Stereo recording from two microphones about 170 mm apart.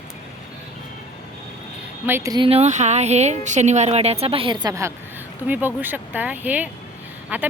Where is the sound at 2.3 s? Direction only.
35° right (ahead or behind).